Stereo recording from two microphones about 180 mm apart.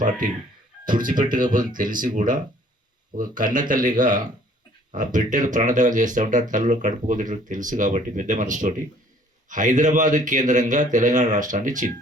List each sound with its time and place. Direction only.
0.9 s speech: 50° right (ahead or behind)